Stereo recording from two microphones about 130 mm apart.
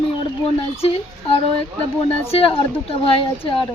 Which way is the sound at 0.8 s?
45° left (ahead or behind).